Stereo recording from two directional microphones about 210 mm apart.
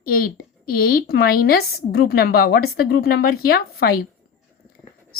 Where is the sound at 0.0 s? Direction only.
45° left (ahead or behind).